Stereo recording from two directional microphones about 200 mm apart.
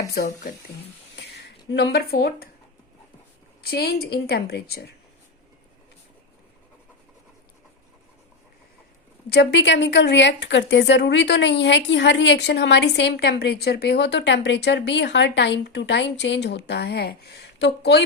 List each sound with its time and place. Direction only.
0.1 s a woman's voice: 50° left (ahead or behind)
1.1 s a sound: 60° left (ahead or behind)
3.6 s a woman's voice: 50° left (ahead or behind)
9.3 s speech: 55° left (ahead or behind)